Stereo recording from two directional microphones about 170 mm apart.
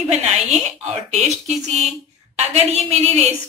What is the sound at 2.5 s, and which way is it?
Speech, 40° right (ahead or behind).